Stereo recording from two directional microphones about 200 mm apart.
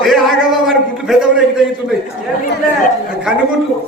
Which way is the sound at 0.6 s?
Centre (ahead or behind).